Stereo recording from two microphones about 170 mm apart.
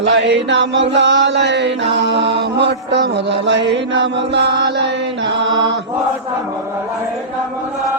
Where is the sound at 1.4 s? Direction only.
90° right.